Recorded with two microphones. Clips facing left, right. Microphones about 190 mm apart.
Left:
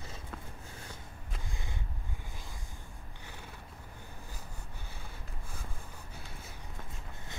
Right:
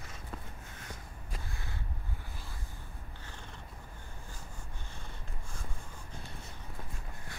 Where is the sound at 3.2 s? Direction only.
10° left (ahead or behind).